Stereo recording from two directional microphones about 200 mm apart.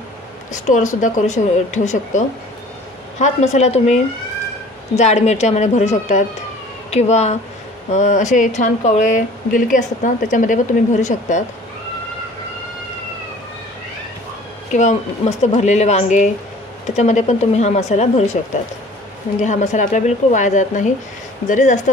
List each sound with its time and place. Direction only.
0.5 s speech: 40° left (ahead or behind)
14.7 s speech: 35° left (ahead or behind)
19.4 s speech: 35° left (ahead or behind)